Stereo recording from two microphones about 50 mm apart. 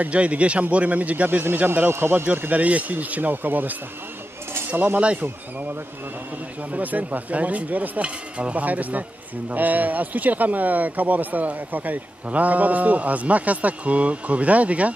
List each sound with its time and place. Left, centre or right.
0.0 s a man's voice: right
1.7 s speech: right
2.6 s speech: right
4.7 s speech: right
6.7 s speech: right